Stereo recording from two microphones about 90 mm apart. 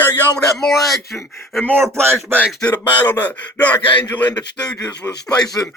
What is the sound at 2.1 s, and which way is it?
Speech, 25° right (ahead or behind).